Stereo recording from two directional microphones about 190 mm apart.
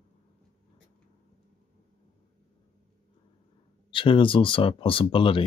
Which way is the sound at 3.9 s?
25° left (ahead or behind).